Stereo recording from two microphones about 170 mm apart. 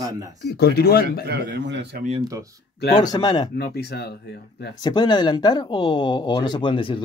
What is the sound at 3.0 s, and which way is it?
Speech, 25° left (ahead or behind).